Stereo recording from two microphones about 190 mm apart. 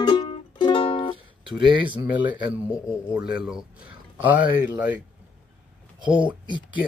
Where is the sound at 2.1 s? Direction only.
10° right (ahead or behind).